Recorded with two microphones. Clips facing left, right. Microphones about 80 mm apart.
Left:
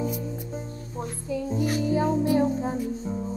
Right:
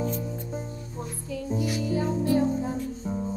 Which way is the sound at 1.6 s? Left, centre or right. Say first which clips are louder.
Left 3 dB; left.